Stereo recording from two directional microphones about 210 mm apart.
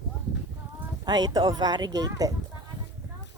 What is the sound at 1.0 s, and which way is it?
Speech, 20° right (ahead or behind).